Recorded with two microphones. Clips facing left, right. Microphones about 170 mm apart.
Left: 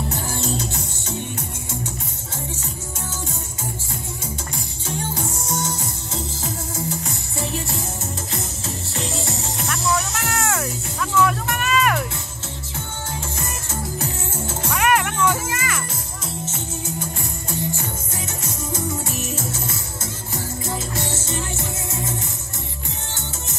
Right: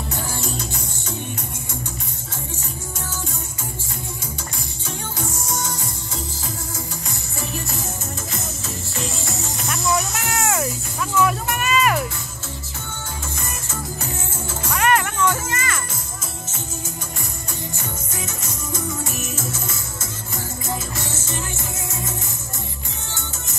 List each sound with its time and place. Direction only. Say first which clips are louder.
5.5 s music: left 2 dB; 30° left (ahead or behind)
9.7 s music: right 1 dB; 10° right (ahead or behind)
14.7 s music: even; 5° left (ahead or behind)
19.3 s music: left 1 dB; 30° left (ahead or behind)